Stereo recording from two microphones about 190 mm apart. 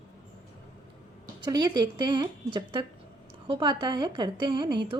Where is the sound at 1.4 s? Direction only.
20° right (ahead or behind).